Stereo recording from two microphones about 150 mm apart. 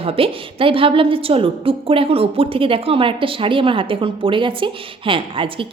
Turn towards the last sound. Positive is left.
turn(degrees=-35)  # may be behind; listen again after turning